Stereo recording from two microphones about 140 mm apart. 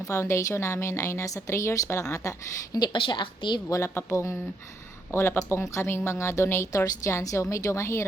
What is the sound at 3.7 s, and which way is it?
Speech, 20° left (ahead or behind).